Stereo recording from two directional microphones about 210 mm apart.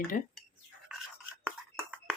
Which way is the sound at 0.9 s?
5° right (ahead or behind).